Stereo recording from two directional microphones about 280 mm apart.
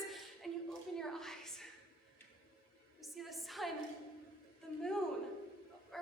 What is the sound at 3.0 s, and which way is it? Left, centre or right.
Music, centre.